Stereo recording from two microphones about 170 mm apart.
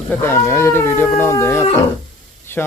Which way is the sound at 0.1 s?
15° left (ahead or behind).